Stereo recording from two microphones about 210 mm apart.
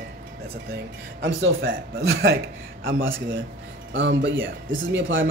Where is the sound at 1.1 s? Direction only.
55° right (ahead or behind).